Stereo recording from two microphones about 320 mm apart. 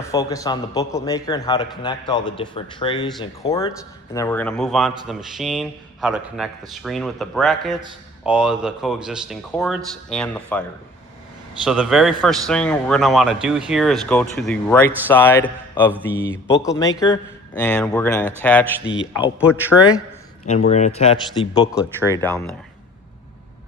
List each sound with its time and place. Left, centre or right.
0.1 s a man's voice: centre
11.6 s a man's voice: centre
19.2 s speech: centre
20.7 s speech: left